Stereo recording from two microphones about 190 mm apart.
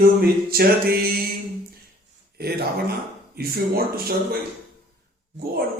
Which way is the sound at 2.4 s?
55° right (ahead or behind).